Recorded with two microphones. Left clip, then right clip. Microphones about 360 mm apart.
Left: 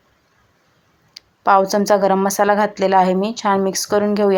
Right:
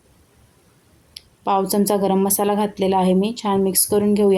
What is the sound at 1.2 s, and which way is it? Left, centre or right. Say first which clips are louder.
Speech: left 6 dB; right.